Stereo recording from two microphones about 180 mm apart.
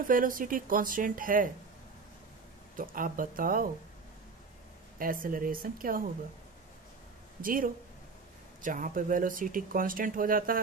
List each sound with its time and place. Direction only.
0.1 s speech: 50° right (ahead or behind)
2.7 s speech: 50° right (ahead or behind)
4.9 s speech: 50° right (ahead or behind)
7.4 s speech: 50° right (ahead or behind)